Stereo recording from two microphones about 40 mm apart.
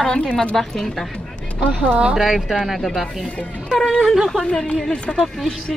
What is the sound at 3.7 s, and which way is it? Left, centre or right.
Speech, centre.